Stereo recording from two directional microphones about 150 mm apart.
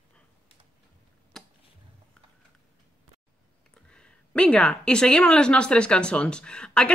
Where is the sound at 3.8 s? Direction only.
5° left (ahead or behind).